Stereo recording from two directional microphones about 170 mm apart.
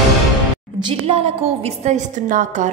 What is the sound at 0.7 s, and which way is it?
A woman's voice, 30° right (ahead or behind).